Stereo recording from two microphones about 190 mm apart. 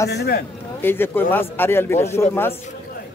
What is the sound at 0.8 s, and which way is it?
A man's voice, 10° left (ahead or behind).